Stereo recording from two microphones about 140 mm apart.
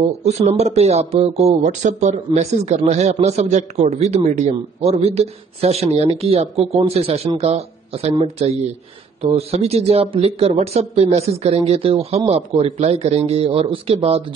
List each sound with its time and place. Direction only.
0.2 s a man's voice: 50° right (ahead or behind)